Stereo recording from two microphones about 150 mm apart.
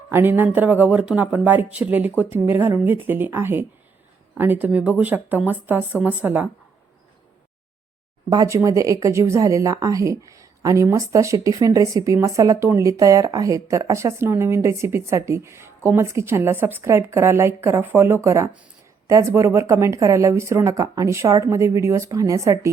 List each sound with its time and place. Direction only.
0.1 s speech: 15° right (ahead or behind)
8.3 s speech: 20° right (ahead or behind)